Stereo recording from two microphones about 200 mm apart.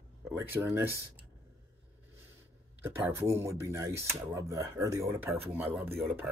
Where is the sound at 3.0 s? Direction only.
15° right (ahead or behind).